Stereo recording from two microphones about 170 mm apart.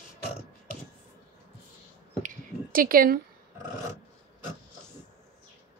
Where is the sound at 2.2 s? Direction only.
55° right (ahead or behind).